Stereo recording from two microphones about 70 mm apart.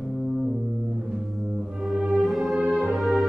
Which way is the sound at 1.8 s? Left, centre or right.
Centre.